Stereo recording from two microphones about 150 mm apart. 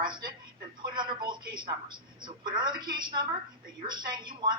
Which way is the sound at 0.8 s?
30° right (ahead or behind).